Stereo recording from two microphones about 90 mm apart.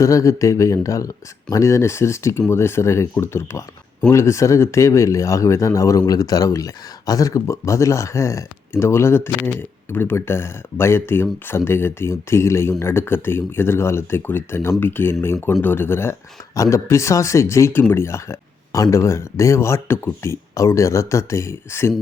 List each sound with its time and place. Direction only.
0.0 s speech: 35° left (ahead or behind)